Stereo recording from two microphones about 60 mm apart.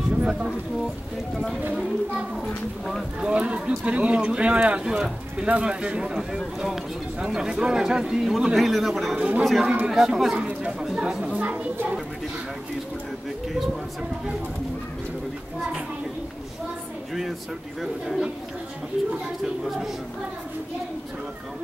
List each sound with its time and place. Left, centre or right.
0.2 s a sound: centre
1.3 s speech: centre
3.2 s speech: centre
9.1 s speech: right
9.4 s speech: centre
18.0 s speech: centre